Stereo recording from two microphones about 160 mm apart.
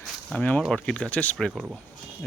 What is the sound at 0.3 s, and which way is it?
Speech, 10° left (ahead or behind).